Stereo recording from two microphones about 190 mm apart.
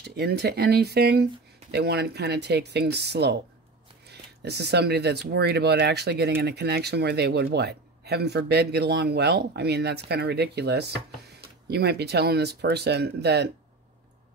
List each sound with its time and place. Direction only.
0.0 s speech: 60° right (ahead or behind)